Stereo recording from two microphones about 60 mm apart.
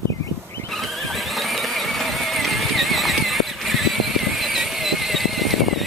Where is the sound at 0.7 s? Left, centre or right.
Centre.